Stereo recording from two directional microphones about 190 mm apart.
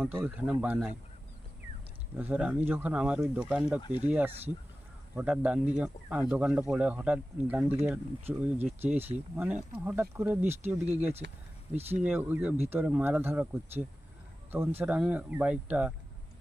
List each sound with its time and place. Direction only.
0.0 s speech: 10° right (ahead or behind)
2.1 s speech: 10° right (ahead or behind)
11.2 s speech: 60° right (ahead or behind)
11.9 s speech: 10° right (ahead or behind)